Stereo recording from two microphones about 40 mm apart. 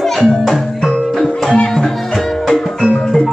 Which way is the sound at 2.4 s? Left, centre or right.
Centre.